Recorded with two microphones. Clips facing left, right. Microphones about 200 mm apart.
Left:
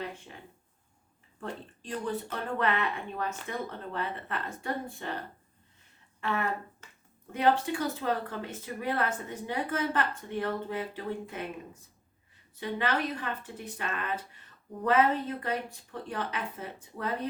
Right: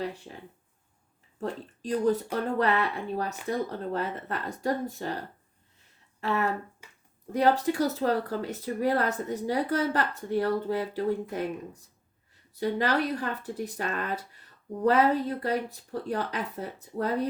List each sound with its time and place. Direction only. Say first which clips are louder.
1.4 s speech: right 6 dB; 40° right (ahead or behind)
6.1 s speech: right 4 dB; 40° right (ahead or behind)
6.8 s a sound: right 1 dB; 10° right (ahead or behind)
7.3 s speech: right 3 dB; 40° right (ahead or behind)